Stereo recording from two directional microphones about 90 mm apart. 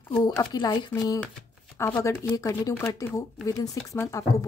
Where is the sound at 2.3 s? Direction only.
40° left (ahead or behind).